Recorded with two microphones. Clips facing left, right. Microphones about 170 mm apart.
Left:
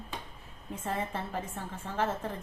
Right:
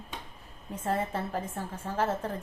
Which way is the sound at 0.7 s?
40° right (ahead or behind).